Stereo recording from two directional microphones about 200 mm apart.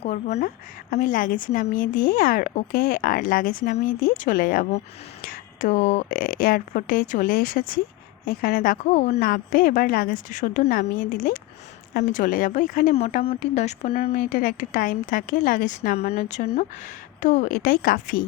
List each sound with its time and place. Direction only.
0.0 s a woman's voice: 35° left (ahead or behind)
14.1 s a woman's voice: 45° left (ahead or behind)